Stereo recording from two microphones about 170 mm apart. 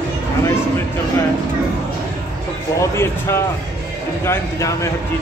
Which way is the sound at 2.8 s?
15° left (ahead or behind).